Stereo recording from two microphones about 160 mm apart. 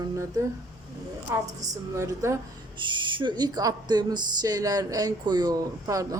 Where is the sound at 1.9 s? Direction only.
20° right (ahead or behind).